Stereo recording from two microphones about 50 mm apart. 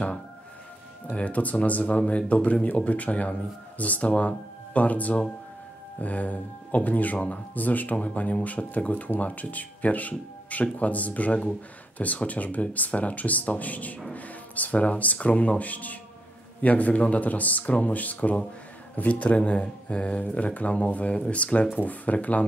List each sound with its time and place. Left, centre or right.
1.1 s speech: left